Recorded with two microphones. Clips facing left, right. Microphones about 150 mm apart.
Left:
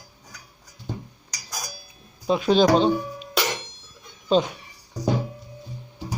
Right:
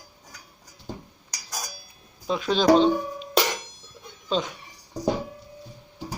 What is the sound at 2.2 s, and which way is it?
Speech, 15° left (ahead or behind).